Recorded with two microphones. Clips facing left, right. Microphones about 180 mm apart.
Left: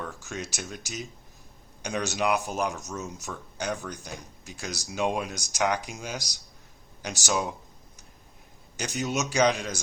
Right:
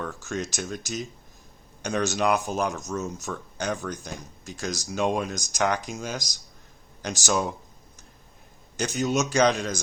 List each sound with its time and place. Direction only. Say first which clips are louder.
0.4 s speech: right 5 dB; 10° left (ahead or behind)
8.7 s speech: right 5 dB; 10° left (ahead or behind)